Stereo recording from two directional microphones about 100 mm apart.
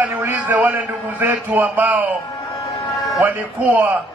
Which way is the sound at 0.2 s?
15° right (ahead or behind).